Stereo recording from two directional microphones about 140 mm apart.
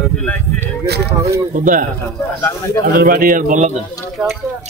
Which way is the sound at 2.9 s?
90° right.